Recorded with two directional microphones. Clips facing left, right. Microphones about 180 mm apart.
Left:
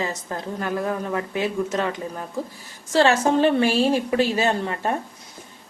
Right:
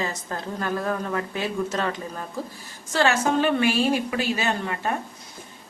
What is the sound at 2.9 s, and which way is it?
A woman's voice, 30° left (ahead or behind).